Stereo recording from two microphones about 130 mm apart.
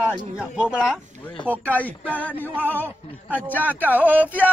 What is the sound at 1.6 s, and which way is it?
Speech, 10° left (ahead or behind).